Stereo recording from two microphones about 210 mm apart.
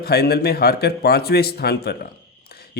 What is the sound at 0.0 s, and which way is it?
Speech, 50° left (ahead or behind).